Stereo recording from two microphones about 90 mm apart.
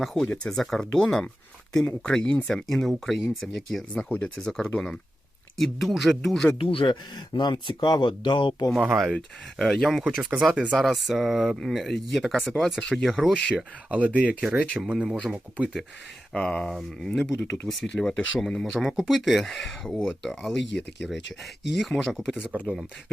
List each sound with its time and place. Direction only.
0.0 s speech: 5° left (ahead or behind)
6.6 s speech: 80° left; by 8.6 s 60° left (ahead or behind)
9.0 s speech: centre (ahead or behind)
13.6 s speech: 15° right (ahead or behind)
14.9 s speech: 5° right (ahead or behind)
16.3 s speech: 10° left (ahead or behind)